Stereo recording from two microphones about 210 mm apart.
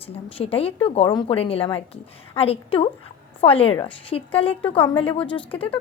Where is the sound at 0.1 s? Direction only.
25° left (ahead or behind).